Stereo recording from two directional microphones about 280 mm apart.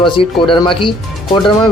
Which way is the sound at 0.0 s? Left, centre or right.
Centre.